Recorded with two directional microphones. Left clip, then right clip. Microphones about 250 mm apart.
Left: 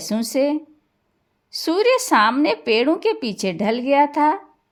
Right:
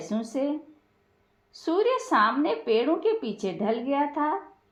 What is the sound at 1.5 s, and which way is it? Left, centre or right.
A woman's voice, left.